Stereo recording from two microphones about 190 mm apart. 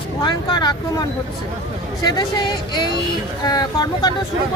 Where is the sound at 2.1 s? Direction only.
20° left (ahead or behind).